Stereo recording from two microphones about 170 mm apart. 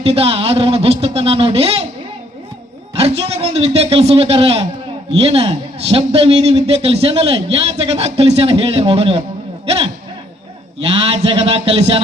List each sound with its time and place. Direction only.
0.0 s a man's voice: 35° right (ahead or behind)
2.9 s a man's voice: 35° right (ahead or behind)